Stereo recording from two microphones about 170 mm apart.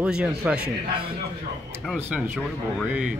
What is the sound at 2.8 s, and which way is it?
Speech, 5° right (ahead or behind).